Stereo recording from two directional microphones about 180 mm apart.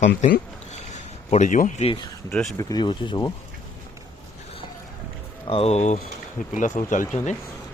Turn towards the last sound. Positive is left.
turn(degrees=40)  # may be behind; listen again after turning